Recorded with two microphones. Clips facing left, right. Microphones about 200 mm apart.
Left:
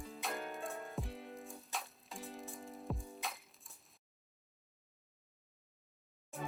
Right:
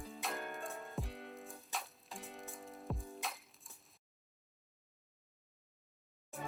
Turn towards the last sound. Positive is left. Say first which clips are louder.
# left 1 dB
turn(degrees=0)  # may be behind; listen again after turning